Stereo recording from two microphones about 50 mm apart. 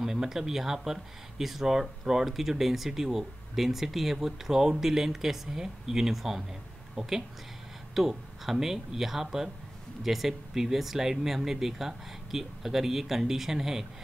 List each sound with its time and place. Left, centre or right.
0.0 s speech: centre